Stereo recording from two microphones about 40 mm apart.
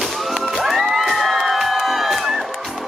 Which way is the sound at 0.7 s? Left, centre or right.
Centre.